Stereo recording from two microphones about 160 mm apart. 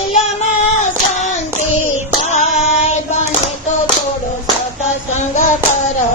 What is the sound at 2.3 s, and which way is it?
Female singing, 45° left (ahead or behind).